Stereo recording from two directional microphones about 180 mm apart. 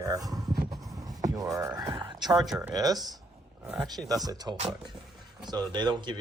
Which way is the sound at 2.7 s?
20° right (ahead or behind).